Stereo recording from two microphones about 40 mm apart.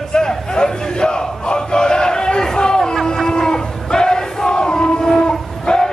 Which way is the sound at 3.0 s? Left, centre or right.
Centre.